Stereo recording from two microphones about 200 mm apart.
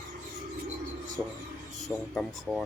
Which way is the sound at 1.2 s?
5° right (ahead or behind).